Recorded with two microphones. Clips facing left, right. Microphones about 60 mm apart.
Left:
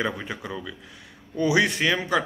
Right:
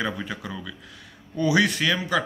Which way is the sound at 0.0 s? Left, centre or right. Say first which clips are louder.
Even; left.